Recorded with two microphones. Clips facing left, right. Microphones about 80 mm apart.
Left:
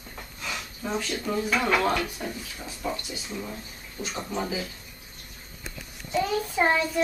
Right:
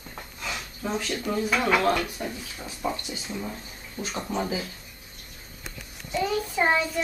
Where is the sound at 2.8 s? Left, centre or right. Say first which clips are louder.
Right 2 dB; right.